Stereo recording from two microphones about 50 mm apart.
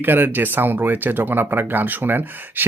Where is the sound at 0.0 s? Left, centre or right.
Right.